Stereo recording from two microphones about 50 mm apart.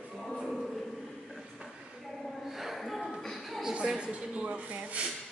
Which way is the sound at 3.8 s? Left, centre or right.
Centre.